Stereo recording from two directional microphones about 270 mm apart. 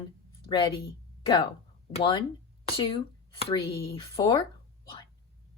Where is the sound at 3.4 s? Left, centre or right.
Left.